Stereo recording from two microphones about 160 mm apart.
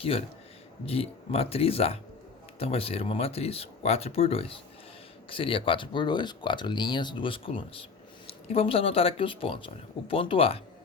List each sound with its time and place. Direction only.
0.0 s speech: 35° left (ahead or behind)